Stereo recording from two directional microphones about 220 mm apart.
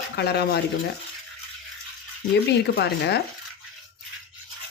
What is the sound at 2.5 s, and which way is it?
Speech, 50° left (ahead or behind).